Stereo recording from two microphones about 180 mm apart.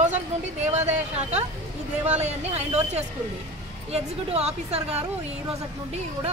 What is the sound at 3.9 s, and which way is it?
A woman's voice, 35° right (ahead or behind).